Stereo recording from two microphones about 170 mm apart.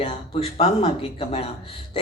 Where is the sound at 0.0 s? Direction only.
35° left (ahead or behind).